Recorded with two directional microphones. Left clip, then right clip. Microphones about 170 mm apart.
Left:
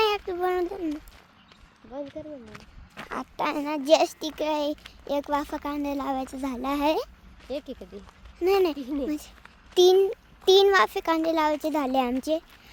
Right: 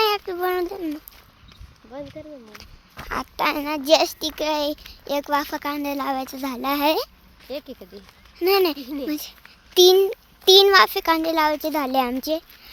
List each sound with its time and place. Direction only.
0.0 s a sound: 10° right (ahead or behind)
1.9 s speech: 5° left (ahead or behind)
3.1 s a child's voice: 10° right (ahead or behind)
7.4 s speech: 5° left (ahead or behind)
8.4 s a child's voice: 10° right (ahead or behind)